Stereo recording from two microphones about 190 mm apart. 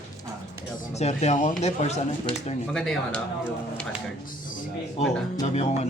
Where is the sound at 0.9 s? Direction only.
35° left (ahead or behind).